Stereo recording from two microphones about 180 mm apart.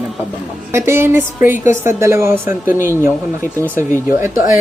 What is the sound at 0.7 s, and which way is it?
A woman's voice, 15° right (ahead or behind).